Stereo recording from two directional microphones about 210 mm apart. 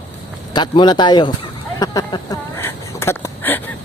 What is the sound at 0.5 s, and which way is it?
Speech, 20° left (ahead or behind).